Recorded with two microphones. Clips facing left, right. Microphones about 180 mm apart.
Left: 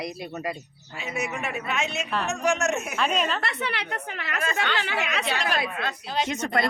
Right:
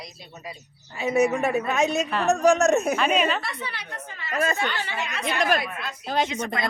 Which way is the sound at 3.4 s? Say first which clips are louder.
Left 3 dB; 65° left (ahead or behind).